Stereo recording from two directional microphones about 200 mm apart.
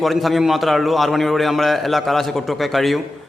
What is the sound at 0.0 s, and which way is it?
A man's voice, centre (ahead or behind).